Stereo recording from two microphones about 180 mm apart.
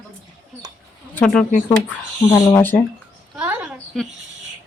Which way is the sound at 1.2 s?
5° left (ahead or behind).